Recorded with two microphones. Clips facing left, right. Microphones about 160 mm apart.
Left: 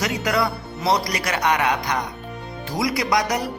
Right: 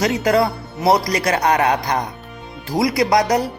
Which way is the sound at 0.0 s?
30° right (ahead or behind).